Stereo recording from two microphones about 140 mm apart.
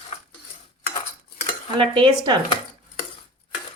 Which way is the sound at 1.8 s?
35° right (ahead or behind).